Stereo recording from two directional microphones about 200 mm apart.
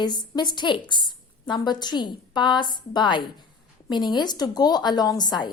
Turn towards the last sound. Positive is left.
turn(degrees=20)  # may be behind; listen again after turning